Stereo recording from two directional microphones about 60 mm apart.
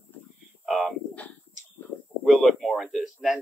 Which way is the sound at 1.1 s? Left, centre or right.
Left.